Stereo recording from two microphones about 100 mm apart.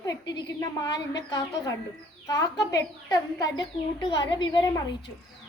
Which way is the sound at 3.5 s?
50° left (ahead or behind).